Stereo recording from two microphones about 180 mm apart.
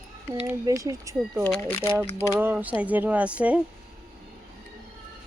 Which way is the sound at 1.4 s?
10° left (ahead or behind).